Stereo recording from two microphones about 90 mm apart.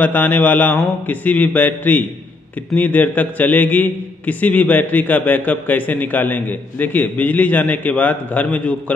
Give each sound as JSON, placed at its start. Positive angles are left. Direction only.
{"t": 0.0, "sound": "a man's voice", "side_deg": 20}